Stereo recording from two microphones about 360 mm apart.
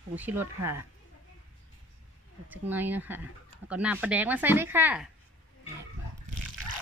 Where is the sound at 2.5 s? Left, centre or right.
Centre.